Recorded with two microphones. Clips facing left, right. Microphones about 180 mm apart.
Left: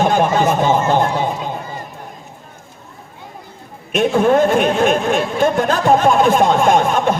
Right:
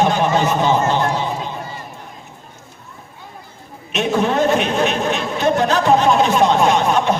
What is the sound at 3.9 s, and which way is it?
Speech, 50° left (ahead or behind).